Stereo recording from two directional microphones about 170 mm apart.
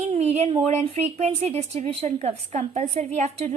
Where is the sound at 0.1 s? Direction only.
40° right (ahead or behind).